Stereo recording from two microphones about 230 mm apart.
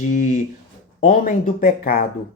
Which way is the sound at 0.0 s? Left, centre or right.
Left.